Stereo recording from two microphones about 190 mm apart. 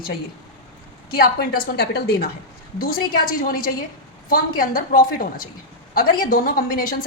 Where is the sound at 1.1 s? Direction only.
55° left (ahead or behind).